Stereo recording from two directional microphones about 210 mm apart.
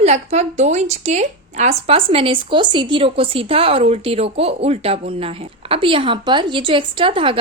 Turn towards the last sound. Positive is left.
turn(degrees=-25)  # may be behind; listen again after turning